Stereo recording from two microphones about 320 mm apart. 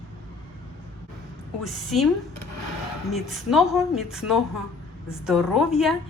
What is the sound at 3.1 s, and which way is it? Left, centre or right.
A woman's voice, centre.